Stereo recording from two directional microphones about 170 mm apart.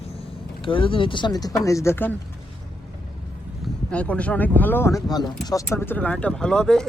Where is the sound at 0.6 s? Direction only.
30° left (ahead or behind); by 2.1 s 15° left (ahead or behind).